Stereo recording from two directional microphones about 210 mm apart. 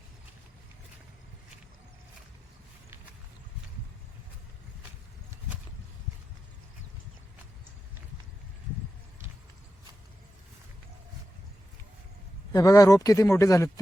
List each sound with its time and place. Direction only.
12.5 s speech: 15° left (ahead or behind)